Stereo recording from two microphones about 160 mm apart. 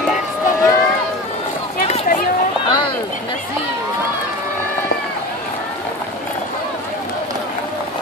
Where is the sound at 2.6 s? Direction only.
30° left (ahead or behind).